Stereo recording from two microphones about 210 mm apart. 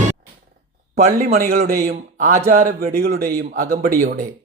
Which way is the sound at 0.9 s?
30° right (ahead or behind).